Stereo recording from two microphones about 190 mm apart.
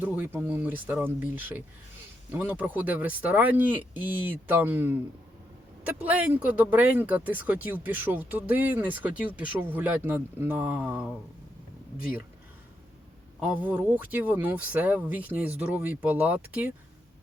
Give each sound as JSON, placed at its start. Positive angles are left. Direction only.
{"t": 0.0, "sound": "speech", "side_deg": -10}
{"t": 11.9, "sound": "speech", "side_deg": 50}
{"t": 13.4, "sound": "speech", "side_deg": -10}